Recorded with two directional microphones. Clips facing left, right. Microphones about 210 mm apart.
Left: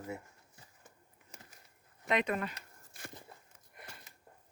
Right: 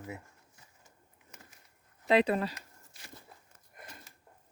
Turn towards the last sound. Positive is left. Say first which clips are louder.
# left 7 dB
turn(degrees=50)  # may be behind; listen again after turning